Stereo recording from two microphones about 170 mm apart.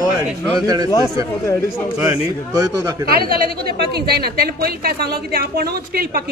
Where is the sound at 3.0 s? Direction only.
60° right (ahead or behind).